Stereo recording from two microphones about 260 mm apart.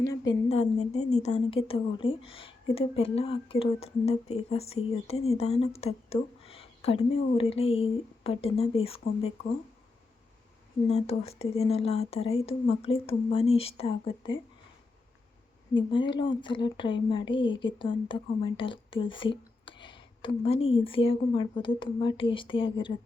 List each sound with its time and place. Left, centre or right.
0.0 s speech: centre
10.8 s speech: left
15.7 s speech: centre